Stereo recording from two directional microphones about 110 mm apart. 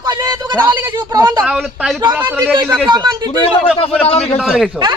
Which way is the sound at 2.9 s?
40° right (ahead or behind).